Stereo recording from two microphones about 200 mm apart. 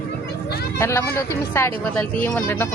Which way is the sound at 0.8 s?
10° left (ahead or behind).